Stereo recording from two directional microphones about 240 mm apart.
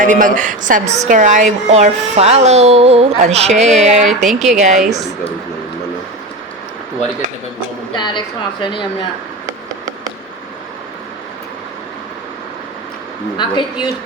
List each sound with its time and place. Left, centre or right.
0.0 s a woman's voice: right
7.9 s a woman's voice: centre
9.5 s a sound: centre
13.3 s a woman's voice: centre